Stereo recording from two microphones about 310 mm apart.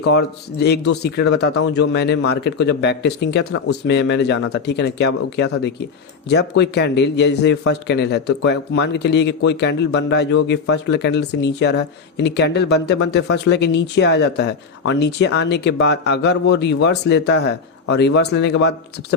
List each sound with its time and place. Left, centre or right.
0.0 s a man's voice: left